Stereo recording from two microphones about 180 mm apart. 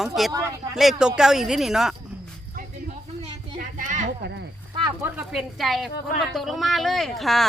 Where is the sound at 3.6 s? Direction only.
45° right (ahead or behind).